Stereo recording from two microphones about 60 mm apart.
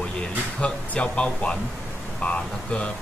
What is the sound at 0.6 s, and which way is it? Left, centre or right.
Speech, centre.